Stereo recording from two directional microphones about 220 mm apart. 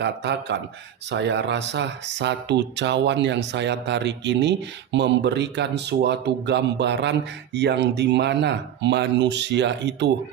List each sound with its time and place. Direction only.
0.0 s speech: 50° right (ahead or behind)